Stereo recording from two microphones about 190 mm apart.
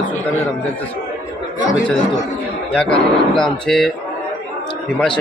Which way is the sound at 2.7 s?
5° left (ahead or behind).